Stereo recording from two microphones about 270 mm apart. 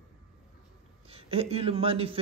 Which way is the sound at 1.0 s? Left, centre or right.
Right.